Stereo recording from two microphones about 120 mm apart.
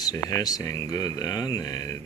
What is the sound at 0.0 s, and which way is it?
Speech, 30° left (ahead or behind).